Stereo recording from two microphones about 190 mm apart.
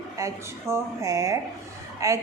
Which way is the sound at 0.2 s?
15° right (ahead or behind).